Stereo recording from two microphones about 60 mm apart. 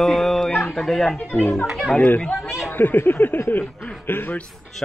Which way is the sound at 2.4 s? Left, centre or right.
Centre.